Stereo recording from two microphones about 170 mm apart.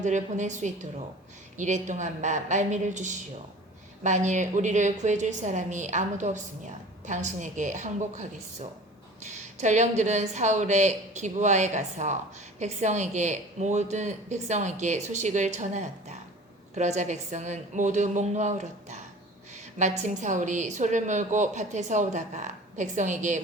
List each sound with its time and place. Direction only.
0.0 s a woman's voice: 45° right (ahead or behind)